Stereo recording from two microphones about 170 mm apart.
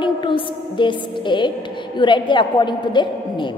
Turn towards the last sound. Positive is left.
turn(degrees=25)  # may be behind; listen again after turning